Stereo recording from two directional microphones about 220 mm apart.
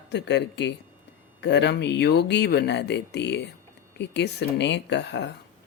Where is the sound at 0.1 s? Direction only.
50° left (ahead or behind).